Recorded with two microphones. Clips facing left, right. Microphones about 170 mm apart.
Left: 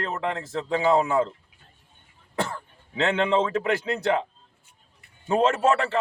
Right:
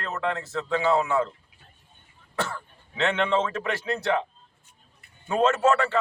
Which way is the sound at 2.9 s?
35° left (ahead or behind).